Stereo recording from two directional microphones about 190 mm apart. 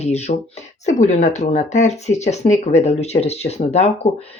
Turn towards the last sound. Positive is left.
turn(degrees=35)  # may be behind; listen again after turning